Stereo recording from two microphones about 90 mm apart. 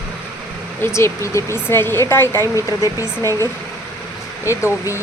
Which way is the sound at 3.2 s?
40° right (ahead or behind).